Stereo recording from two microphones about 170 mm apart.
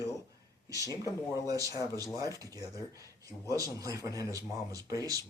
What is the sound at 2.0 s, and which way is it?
Speech, 20° right (ahead or behind).